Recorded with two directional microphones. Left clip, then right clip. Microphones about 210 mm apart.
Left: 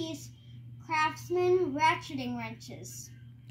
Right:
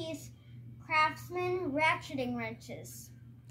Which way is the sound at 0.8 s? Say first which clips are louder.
Even; 15° right (ahead or behind).